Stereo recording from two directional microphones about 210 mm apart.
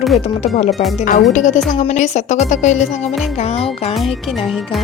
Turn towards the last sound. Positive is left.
turn(degrees=30)  # may be behind; listen again after turning